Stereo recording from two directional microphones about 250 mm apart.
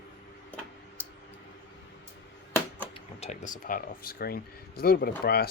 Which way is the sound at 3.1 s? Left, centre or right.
Left.